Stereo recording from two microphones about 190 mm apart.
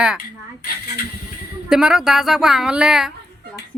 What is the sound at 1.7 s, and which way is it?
Speech, centre (ahead or behind).